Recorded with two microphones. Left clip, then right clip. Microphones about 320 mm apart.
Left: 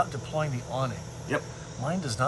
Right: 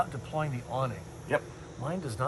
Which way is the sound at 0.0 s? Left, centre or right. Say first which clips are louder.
Left 3 dB; centre.